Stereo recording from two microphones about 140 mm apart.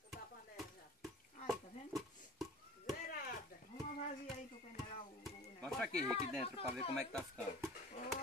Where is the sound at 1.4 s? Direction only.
Centre (ahead or behind).